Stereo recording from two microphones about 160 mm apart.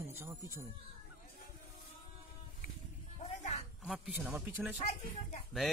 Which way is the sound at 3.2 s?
45° left (ahead or behind).